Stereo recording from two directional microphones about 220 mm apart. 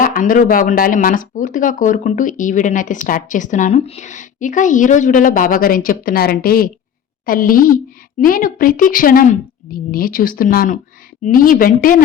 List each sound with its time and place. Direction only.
0.0 s speech: 40° left (ahead or behind)